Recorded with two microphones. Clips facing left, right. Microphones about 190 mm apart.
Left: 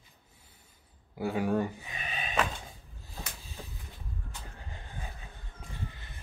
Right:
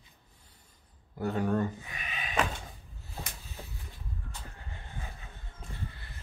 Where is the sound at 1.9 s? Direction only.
30° left (ahead or behind).